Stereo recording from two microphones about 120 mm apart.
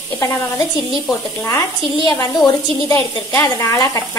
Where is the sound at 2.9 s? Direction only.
20° left (ahead or behind).